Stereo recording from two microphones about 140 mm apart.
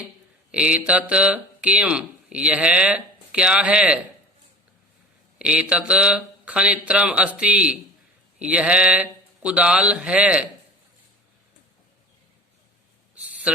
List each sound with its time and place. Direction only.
0.5 s speech: 10° right (ahead or behind)
5.4 s speech: 10° right (ahead or behind)